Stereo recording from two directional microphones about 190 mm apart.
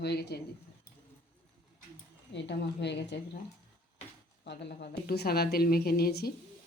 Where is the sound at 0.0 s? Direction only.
60° left (ahead or behind).